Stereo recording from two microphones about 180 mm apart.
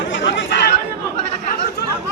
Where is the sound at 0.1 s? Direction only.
85° left.